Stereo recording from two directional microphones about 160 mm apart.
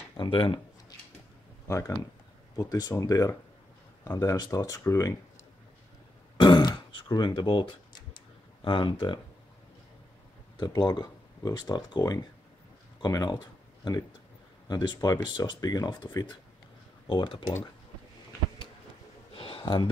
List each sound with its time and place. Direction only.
0.2 s a sound: 30° left (ahead or behind)
1.7 s speech: 20° left (ahead or behind)
6.3 s throat clearing: 30° left (ahead or behind)
8.6 s speech: 30° left (ahead or behind)
10.6 s speech: 25° left (ahead or behind)
14.7 s speech: 25° left (ahead or behind)
19.3 s a sound: 35° left (ahead or behind)